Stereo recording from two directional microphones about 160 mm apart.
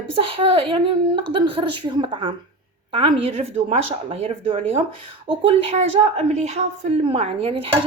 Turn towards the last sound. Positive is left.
turn(degrees=-35)  # may be behind; listen again after turning